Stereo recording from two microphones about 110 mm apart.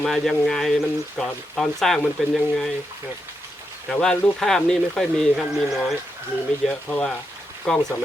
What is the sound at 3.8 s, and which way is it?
Speech, 10° left (ahead or behind).